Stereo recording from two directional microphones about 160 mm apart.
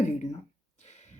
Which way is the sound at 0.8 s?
45° left (ahead or behind).